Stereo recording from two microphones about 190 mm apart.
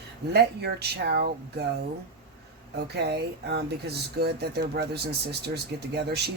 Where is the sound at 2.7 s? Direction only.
60° right (ahead or behind).